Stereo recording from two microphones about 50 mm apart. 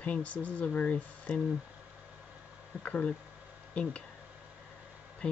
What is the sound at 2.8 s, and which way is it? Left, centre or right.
Speech, left.